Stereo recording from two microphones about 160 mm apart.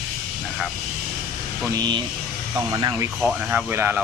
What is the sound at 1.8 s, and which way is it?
Speech, 25° right (ahead or behind).